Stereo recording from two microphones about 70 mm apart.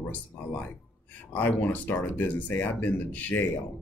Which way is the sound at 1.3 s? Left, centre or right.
Left.